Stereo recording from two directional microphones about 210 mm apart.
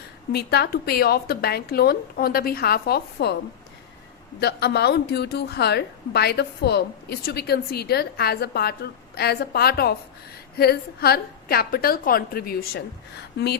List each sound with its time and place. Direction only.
0.3 s a woman's voice: 50° left (ahead or behind)
4.4 s a woman's voice: 50° left (ahead or behind)